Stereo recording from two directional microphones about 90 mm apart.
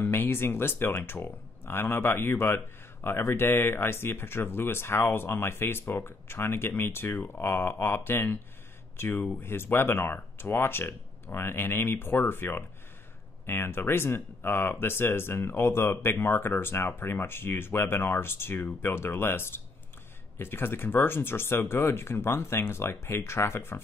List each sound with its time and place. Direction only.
0.0 s speech: 25° left (ahead or behind)